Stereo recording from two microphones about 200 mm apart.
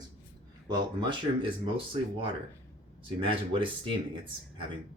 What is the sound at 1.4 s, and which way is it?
Speech, 25° right (ahead or behind).